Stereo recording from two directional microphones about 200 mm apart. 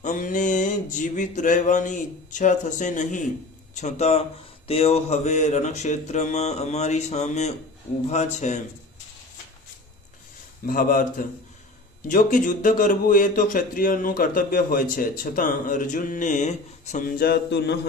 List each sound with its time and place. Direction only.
0.0 s a sound: 40° left (ahead or behind)
3.8 s speech: 35° left (ahead or behind)
10.7 s a man's voice: 45° left (ahead or behind)